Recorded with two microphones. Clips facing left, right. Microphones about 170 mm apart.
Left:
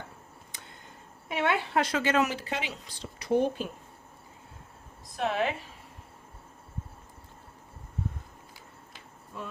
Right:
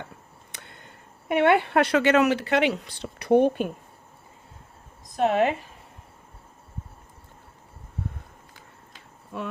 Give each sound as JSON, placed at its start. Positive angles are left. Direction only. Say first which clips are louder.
{"t": 0.5, "sound": "speech", "louder": "right 4 dB", "side_deg": -65}
{"t": 5.1, "sound": "speech", "louder": "right 7 dB", "side_deg": -45}
{"t": 9.3, "sound": "speech", "louder": "right 7 dB", "side_deg": -70}